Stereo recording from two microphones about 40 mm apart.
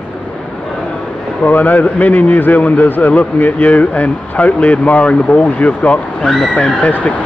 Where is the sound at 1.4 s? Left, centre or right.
Left.